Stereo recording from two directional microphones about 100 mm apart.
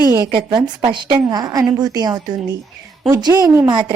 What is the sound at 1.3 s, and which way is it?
A woman's voice, 40° right (ahead or behind).